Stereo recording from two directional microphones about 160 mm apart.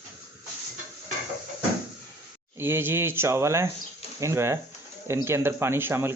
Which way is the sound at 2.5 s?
15° right (ahead or behind).